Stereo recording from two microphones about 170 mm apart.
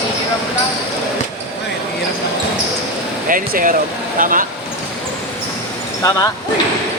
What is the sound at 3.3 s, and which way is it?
Speech, 55° right (ahead or behind).